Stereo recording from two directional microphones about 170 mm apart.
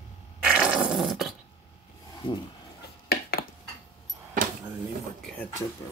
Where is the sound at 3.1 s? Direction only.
60° left (ahead or behind).